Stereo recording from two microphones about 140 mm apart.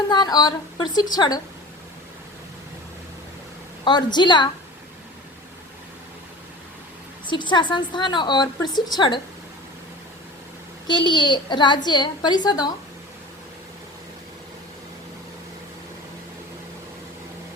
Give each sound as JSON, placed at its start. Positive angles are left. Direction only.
{"t": 0.1, "sound": "a woman's voice", "side_deg": 30}
{"t": 3.8, "sound": "a woman's voice", "side_deg": 30}
{"t": 7.3, "sound": "a woman's voice", "side_deg": 35}
{"t": 10.8, "sound": "a woman's voice", "side_deg": 35}